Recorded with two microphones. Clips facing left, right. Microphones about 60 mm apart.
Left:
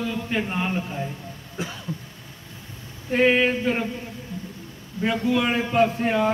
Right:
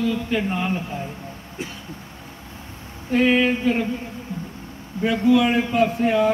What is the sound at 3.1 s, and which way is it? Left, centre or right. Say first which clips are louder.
Speech: right 1 dB; centre.